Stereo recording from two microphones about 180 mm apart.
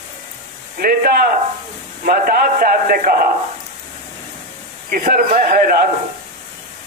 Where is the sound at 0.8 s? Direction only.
55° right (ahead or behind).